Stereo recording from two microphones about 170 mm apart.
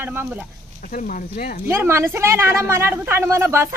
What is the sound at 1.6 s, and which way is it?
Speech, 15° right (ahead or behind).